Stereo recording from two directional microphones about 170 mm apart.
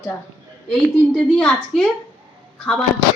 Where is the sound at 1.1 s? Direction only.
5° left (ahead or behind).